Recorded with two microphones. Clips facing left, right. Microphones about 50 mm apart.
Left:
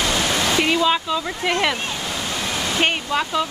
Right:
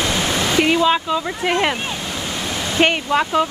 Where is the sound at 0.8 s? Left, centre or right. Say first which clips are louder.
Right 3 dB; right.